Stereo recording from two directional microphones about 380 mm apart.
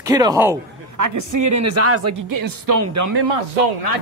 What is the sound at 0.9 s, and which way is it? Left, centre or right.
Speech, right.